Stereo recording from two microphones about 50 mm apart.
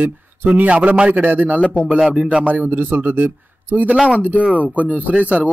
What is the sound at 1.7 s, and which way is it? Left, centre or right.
Speech, centre.